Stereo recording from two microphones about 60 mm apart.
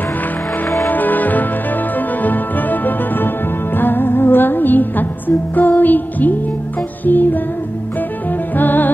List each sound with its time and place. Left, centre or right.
0.8 s music: left
8.5 s music: left